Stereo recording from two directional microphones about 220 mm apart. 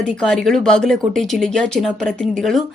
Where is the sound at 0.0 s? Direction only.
5° left (ahead or behind).